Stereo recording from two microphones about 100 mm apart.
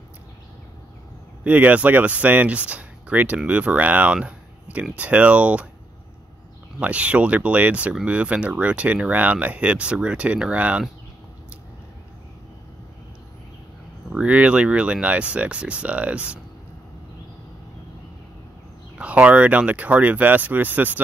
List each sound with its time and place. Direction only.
1.4 s speech: 15° right (ahead or behind)
6.8 s speech: 15° right (ahead or behind)
14.1 s speech: 15° right (ahead or behind)
18.9 s speech: 10° right (ahead or behind)